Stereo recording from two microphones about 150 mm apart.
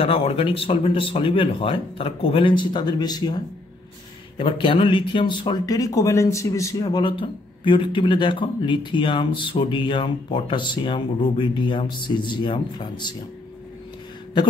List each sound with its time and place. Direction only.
0.0 s speech: 40° left (ahead or behind)